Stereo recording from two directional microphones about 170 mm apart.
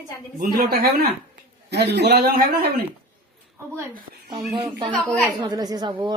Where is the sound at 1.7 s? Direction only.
80° right.